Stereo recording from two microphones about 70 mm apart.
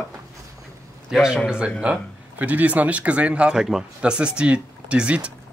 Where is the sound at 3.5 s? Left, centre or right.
Centre.